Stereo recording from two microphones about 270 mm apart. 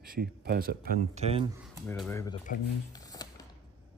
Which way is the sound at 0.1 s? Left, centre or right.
Right.